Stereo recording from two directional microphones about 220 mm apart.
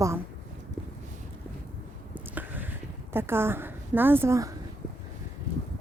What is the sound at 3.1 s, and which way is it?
Speech, 10° right (ahead or behind).